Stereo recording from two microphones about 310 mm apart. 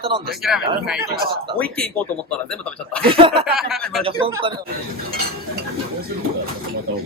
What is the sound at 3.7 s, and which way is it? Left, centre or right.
Speech, centre.